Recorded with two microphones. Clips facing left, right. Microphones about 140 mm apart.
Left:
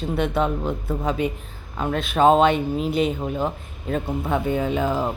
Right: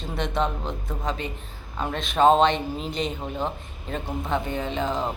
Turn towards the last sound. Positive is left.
turn(degrees=10)  # may be behind; listen again after turning